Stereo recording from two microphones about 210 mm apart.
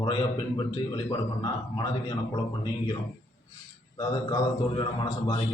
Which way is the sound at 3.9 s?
20° left (ahead or behind).